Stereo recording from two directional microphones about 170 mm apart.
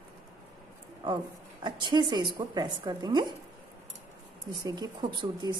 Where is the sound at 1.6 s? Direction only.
25° right (ahead or behind).